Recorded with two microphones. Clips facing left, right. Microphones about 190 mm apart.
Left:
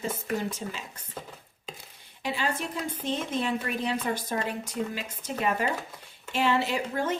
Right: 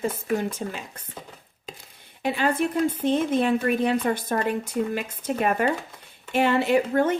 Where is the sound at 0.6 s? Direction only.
60° right (ahead or behind).